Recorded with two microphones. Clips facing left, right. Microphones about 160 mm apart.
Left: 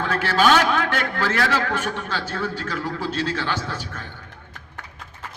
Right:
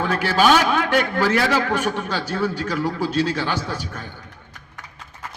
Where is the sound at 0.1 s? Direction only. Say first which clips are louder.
Right 1 dB; 15° right (ahead or behind).